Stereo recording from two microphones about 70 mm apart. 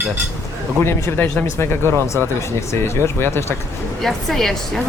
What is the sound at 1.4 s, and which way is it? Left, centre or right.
Speech, left.